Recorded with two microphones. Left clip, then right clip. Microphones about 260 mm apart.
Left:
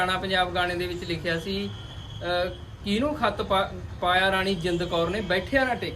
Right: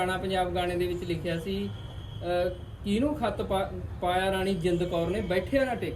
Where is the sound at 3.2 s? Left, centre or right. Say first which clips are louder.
Left 5 dB; left.